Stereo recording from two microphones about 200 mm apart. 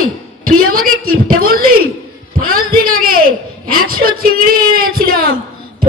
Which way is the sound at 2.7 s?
45° right (ahead or behind).